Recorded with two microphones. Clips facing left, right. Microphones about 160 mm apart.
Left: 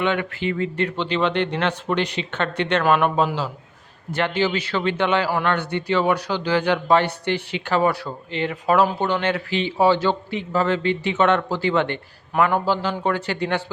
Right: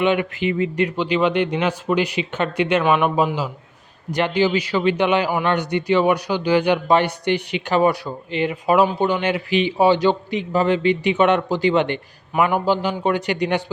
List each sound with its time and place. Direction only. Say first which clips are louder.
0.0 s speech: right 4 dB; 15° right (ahead or behind)